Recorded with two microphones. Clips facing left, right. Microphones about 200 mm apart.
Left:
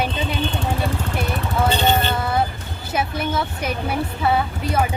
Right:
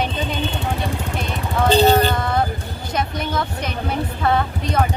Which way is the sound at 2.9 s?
5° left (ahead or behind).